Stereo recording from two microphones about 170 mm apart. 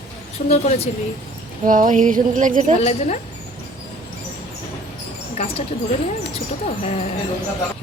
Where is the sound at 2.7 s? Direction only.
40° left (ahead or behind).